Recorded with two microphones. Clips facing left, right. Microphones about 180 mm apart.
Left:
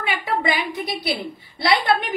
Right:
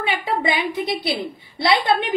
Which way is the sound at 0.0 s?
25° right (ahead or behind).